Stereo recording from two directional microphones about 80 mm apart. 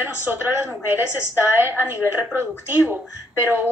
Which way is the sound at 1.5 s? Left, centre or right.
Right.